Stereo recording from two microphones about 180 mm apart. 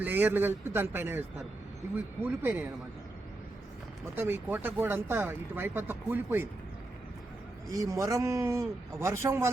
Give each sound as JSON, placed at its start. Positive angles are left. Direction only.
{"t": 0.0, "sound": "speech", "side_deg": -10}
{"t": 2.2, "sound": "speech", "side_deg": -10}
{"t": 4.1, "sound": "speech", "side_deg": -10}
{"t": 7.7, "sound": "speech", "side_deg": -20}